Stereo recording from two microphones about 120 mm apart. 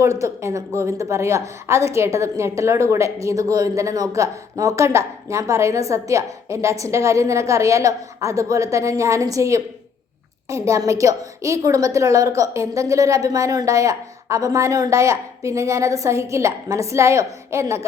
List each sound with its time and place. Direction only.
0.0 s a woman's voice: 25° right (ahead or behind)